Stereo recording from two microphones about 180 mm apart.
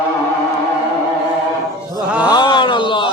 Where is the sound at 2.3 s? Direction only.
25° left (ahead or behind).